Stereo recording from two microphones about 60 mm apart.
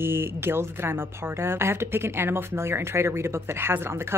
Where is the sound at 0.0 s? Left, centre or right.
Right.